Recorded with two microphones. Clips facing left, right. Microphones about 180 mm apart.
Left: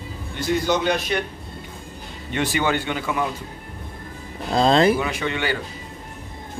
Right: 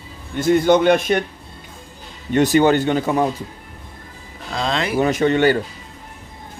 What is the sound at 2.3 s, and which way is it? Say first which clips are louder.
Speech: right 8 dB; 45° right (ahead or behind).